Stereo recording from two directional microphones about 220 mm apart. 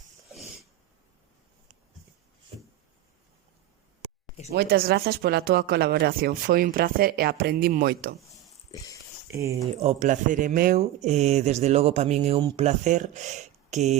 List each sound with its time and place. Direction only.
4.5 s speech: 45° right (ahead or behind)
9.2 s speech: 15° right (ahead or behind)
9.8 s speech: 35° right (ahead or behind)